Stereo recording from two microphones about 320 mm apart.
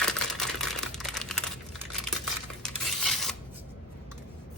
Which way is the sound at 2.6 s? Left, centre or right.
Centre.